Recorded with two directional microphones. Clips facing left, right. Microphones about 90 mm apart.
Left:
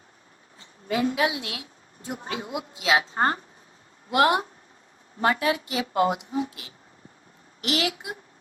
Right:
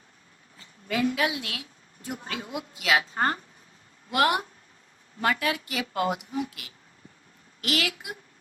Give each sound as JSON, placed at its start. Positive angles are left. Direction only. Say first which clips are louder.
{"t": 0.6, "sound": "a woman's voice", "louder": "left 1 dB", "side_deg": 25}